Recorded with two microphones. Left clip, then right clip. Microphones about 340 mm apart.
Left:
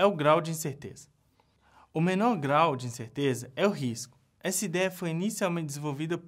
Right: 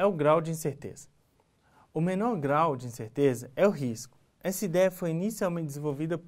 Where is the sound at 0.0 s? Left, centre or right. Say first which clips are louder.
Left 1 dB; left.